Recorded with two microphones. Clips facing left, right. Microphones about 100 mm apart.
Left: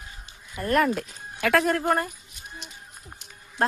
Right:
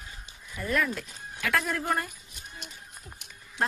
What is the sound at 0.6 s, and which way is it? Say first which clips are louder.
A woman's voice: left 6 dB; 65° left (ahead or behind).